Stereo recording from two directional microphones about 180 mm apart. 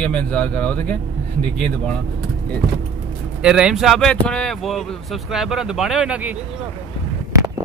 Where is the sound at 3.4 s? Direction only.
5° right (ahead or behind).